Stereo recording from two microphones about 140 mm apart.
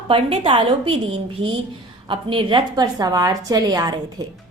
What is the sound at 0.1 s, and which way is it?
A woman's voice, 40° right (ahead or behind).